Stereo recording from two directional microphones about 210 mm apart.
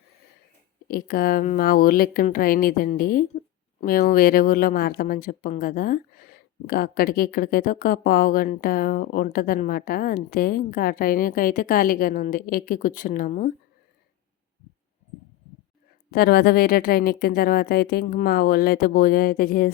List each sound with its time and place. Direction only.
0.9 s a woman's voice: 45° left (ahead or behind)
16.1 s a woman's voice: 50° left (ahead or behind)